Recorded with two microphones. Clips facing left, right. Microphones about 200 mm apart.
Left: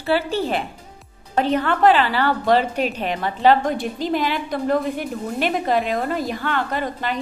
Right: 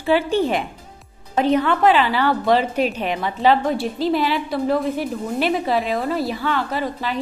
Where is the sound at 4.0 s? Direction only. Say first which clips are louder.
Right 2 dB; 45° left (ahead or behind).